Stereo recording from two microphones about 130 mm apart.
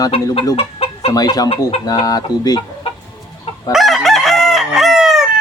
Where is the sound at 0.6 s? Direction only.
50° left (ahead or behind).